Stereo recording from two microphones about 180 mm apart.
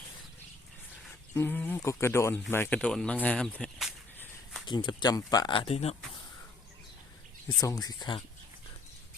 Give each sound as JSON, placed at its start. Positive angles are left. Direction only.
{"t": 1.4, "sound": "speech", "side_deg": 10}
{"t": 4.6, "sound": "speech", "side_deg": 25}
{"t": 7.6, "sound": "speech", "side_deg": 20}